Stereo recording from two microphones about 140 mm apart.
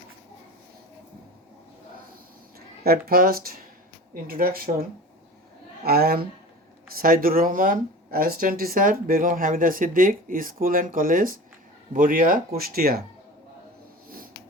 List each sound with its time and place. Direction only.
2.6 s a sound: 90° right
3.1 s speech: 90° right
12.5 s speech: 90° right